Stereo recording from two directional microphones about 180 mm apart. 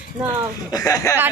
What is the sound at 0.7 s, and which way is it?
Speech, 20° left (ahead or behind).